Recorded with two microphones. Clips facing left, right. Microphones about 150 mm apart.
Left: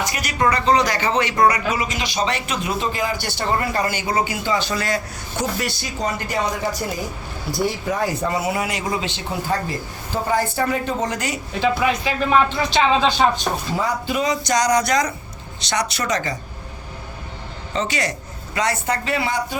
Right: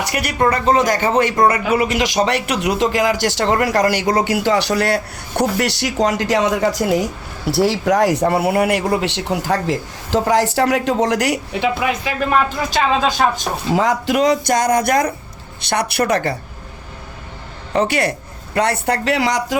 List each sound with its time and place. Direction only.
0.0 s speech: 65° right (ahead or behind)
0.4 s a man's voice: 50° right (ahead or behind)
1.7 s speech: 60° right (ahead or behind)
11.8 s speech: 5° right (ahead or behind)
13.7 s speech: 85° right; by 16.4 s 60° right (ahead or behind)
17.7 s speech: 60° right (ahead or behind); by 19.5 s 85° right